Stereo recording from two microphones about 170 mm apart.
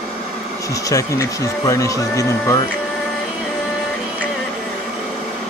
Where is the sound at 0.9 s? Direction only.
20° left (ahead or behind).